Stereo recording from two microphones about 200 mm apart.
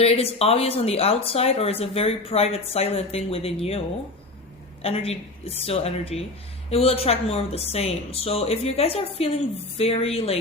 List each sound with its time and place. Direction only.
0.0 s speech: 30° left (ahead or behind)
4.8 s speech: 30° left (ahead or behind)